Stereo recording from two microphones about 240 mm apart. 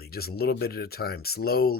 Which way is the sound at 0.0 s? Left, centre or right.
Left.